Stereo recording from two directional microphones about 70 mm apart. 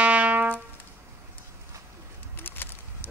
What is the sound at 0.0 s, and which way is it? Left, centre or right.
Trumpet, centre.